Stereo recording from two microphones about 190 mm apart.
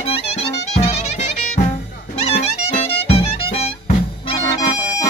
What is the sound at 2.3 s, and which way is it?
Music, 35° left (ahead or behind).